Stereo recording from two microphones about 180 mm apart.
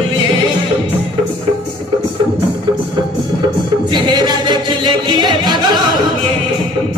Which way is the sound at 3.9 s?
25° right (ahead or behind).